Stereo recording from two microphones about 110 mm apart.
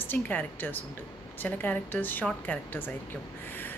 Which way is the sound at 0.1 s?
15° left (ahead or behind).